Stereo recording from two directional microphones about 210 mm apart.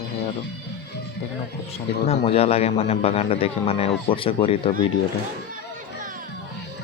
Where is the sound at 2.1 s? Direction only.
30° left (ahead or behind).